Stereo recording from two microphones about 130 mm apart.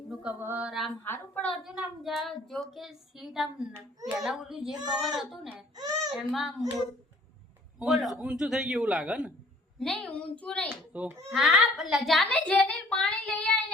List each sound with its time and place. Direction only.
0.1 s a sound: 5° right (ahead or behind)
0.3 s a child's voice: 15° right (ahead or behind)
1.0 s speech: 15° left (ahead or behind)
1.5 s child singing: 5° right (ahead or behind)
5.7 s speech: 30° right (ahead or behind)
6.1 s child singing: centre (ahead or behind)
7.8 s child singing: 5° right (ahead or behind)
9.7 s speech: 5° left (ahead or behind)
10.7 s a child's voice: 10° right (ahead or behind)
11.3 s child singing: centre (ahead or behind)
12.3 s speech: 10° left (ahead or behind)